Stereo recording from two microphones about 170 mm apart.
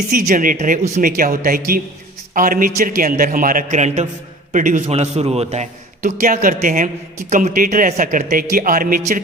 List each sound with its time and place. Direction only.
0.1 s a man's voice: 55° right (ahead or behind)
1.1 s a man's voice: 60° right (ahead or behind)